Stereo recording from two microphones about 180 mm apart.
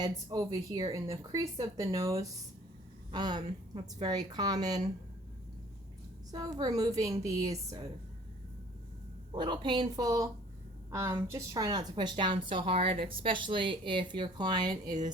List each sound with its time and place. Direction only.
0.0 s a woman's voice: 20° right (ahead or behind)
6.3 s a woman's voice: 20° right (ahead or behind)
9.3 s a woman's voice: 25° right (ahead or behind)